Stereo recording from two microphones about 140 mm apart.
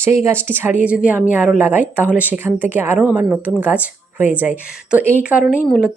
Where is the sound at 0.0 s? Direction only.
20° right (ahead or behind).